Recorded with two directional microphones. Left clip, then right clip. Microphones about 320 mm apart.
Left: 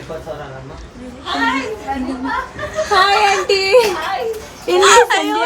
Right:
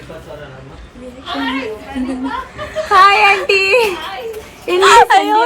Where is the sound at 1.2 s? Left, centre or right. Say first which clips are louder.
Left 3 dB; centre.